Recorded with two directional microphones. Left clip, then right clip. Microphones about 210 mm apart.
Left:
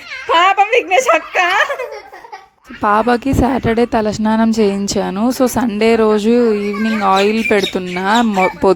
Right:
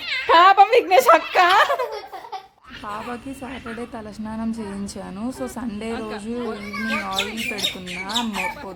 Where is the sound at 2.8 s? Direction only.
45° left (ahead or behind).